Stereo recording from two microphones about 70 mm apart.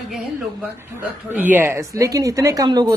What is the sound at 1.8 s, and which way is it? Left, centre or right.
Speech, right.